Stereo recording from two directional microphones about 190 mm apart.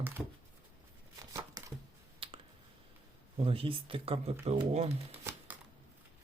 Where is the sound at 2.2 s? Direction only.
30° right (ahead or behind).